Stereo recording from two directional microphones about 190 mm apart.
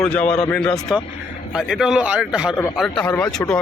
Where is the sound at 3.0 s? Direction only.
15° left (ahead or behind).